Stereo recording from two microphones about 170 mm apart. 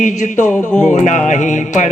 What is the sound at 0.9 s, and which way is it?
A man's voice, 45° left (ahead or behind).